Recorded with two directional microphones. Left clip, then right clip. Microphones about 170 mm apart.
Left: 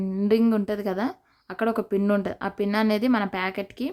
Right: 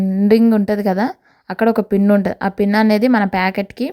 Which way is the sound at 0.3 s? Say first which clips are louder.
Right 9 dB; 30° right (ahead or behind).